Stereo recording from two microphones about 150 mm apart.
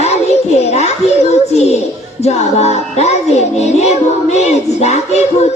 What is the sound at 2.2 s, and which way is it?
Music, 45° left (ahead or behind).